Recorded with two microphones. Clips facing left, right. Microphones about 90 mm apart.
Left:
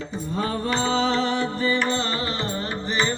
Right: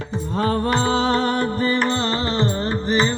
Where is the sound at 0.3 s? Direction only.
50° right (ahead or behind).